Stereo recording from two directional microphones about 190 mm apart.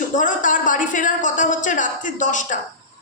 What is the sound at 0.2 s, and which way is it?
A woman's voice, 45° left (ahead or behind).